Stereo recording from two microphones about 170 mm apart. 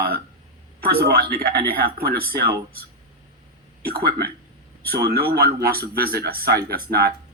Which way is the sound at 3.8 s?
65° right (ahead or behind).